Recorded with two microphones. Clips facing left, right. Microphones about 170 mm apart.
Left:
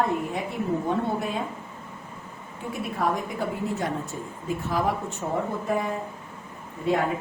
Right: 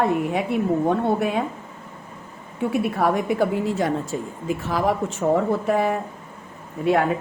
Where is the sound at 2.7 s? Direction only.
70° right (ahead or behind).